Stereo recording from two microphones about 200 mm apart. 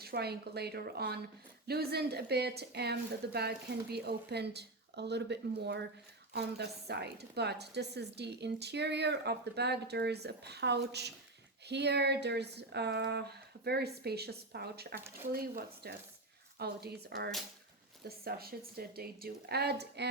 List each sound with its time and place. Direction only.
0.0 s a woman's voice: 50° right (ahead or behind)